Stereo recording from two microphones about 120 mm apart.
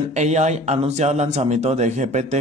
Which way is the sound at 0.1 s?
75° right (ahead or behind).